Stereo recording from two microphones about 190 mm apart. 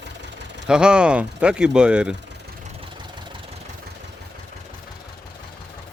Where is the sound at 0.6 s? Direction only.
5° right (ahead or behind).